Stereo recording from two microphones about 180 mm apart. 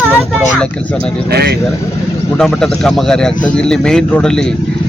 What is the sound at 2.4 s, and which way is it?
Speech, centre (ahead or behind).